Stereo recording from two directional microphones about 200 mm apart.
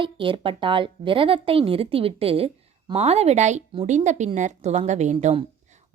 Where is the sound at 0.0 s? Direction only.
25° right (ahead or behind).